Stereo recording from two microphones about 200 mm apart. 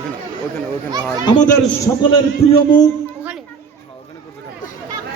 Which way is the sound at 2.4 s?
30° left (ahead or behind).